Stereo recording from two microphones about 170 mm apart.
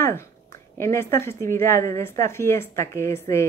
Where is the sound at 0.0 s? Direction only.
15° left (ahead or behind).